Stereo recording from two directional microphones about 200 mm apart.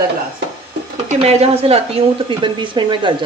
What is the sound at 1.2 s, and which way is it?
Speech, 30° right (ahead or behind).